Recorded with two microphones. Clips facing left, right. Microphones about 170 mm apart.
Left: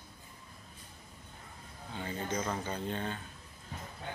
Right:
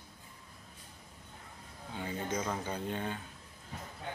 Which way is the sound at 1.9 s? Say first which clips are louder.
Even; 10° right (ahead or behind).